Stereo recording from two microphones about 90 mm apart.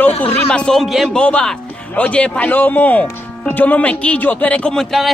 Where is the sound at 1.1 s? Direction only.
10° left (ahead or behind).